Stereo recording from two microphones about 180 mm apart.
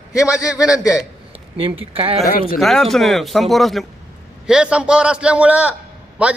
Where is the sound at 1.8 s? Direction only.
30° right (ahead or behind).